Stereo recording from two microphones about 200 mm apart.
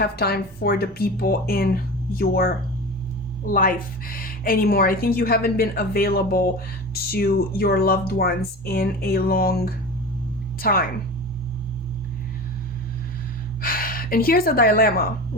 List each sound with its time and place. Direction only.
0.0 s a woman's voice: 50° left (ahead or behind)
3.5 s a woman's voice: 45° left (ahead or behind)
13.6 s speech: 45° left (ahead or behind)